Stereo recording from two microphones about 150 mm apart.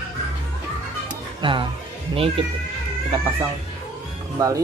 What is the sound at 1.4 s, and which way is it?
Speech, 35° right (ahead or behind).